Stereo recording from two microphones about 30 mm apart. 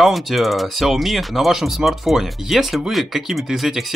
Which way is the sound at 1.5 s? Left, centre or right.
Centre.